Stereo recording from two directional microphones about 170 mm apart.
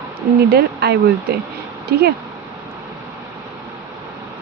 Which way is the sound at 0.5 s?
70° right (ahead or behind).